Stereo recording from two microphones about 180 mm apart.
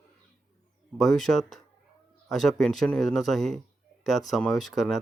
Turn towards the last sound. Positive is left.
turn(degrees=0)  # may be behind; listen again after turning